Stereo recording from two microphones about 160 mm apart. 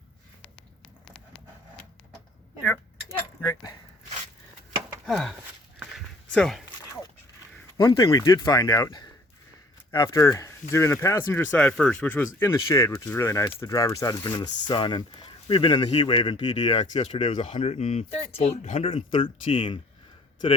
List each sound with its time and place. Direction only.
1.0 s a sound: 5° left (ahead or behind)
3.4 s speech: 25° left (ahead or behind)
5.0 s a sound: centre (ahead or behind)
6.3 s speech: centre (ahead or behind)
7.8 s speech: 30° left (ahead or behind)
10.1 s speech: 20° left (ahead or behind); by 18.9 s 45° left (ahead or behind)
18.9 s speech: 35° left (ahead or behind)